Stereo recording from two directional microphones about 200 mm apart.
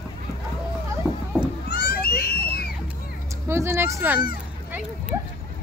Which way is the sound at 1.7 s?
50° left (ahead or behind).